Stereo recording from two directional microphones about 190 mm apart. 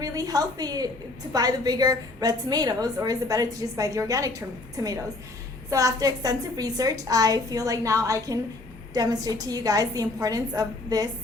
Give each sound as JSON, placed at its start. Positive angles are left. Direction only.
{"t": 0.0, "sound": "a woman's voice", "side_deg": -20}